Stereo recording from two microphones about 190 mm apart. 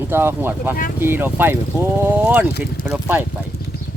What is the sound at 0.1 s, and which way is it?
Speech, 10° right (ahead or behind).